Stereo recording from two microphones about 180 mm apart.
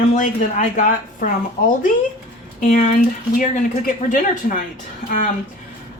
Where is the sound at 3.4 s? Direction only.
50° left (ahead or behind).